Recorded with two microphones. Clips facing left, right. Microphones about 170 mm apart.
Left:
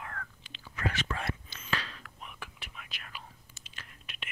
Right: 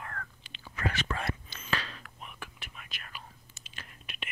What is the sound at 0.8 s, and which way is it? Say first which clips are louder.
Whispering: right 1 dB; 45° right (ahead or behind).